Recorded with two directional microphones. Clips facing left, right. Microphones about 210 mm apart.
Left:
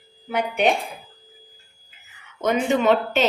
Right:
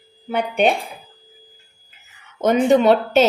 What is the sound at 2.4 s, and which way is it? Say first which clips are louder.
Speech: right 6 dB; 40° right (ahead or behind).